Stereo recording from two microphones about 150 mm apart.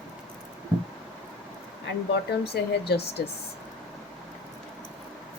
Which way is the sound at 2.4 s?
90° left.